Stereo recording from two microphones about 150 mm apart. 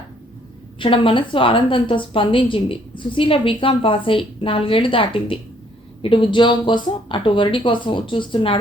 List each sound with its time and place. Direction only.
0.8 s a woman's voice: 35° left (ahead or behind)